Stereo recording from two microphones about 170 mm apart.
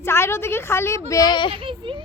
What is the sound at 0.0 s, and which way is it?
Speech, 15° left (ahead or behind).